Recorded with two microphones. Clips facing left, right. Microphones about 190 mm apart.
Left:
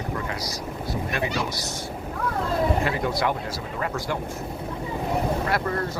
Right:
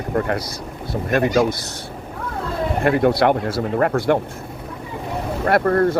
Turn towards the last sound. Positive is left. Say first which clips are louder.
# right 10 dB
turn(degrees=-55)  # may be behind; listen again after turning